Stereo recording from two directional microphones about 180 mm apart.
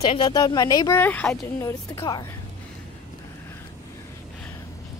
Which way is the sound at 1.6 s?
25° left (ahead or behind).